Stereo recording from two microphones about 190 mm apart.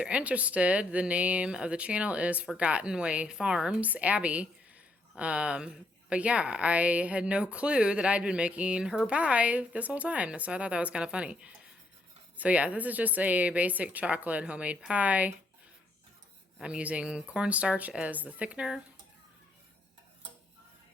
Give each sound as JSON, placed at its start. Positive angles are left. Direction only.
{"t": 0.0, "sound": "a woman's voice", "side_deg": -5}
{"t": 16.6, "sound": "a woman's voice", "side_deg": -5}